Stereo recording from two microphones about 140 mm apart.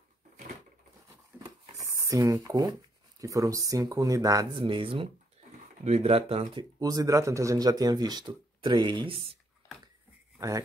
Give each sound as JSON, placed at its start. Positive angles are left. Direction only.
{"t": 1.4, "sound": "a sound", "side_deg": -25}
{"t": 3.2, "sound": "speech", "side_deg": -25}
{"t": 6.8, "sound": "speech", "side_deg": -25}